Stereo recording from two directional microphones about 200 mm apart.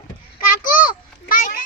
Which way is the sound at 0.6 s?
45° left (ahead or behind).